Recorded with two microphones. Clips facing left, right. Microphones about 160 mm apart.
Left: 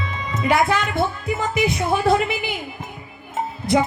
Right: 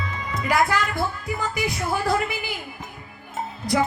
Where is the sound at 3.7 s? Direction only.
25° left (ahead or behind).